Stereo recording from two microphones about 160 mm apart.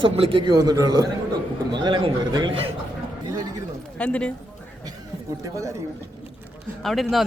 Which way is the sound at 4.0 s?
5° left (ahead or behind).